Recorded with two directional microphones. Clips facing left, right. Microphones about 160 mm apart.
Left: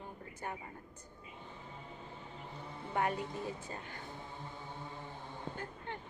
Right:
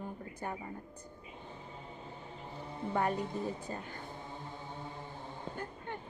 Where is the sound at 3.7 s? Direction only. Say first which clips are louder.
Right 4 dB; 35° right (ahead or behind).